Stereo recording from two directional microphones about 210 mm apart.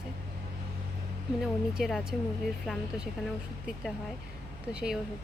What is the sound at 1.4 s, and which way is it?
Speech, centre (ahead or behind).